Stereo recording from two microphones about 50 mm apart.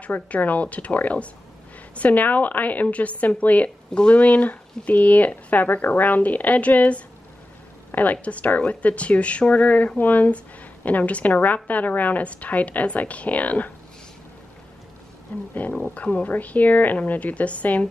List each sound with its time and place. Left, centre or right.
0.0 s a woman's voice: left
15.3 s a woman's voice: left